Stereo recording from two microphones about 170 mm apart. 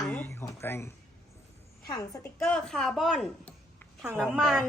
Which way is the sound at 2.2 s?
5° left (ahead or behind).